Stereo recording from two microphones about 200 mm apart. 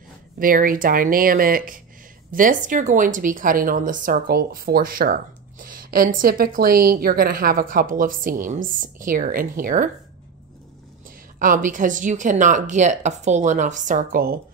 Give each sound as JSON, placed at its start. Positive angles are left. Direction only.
{"t": 0.4, "sound": "speech", "side_deg": -45}
{"t": 11.3, "sound": "speech", "side_deg": -40}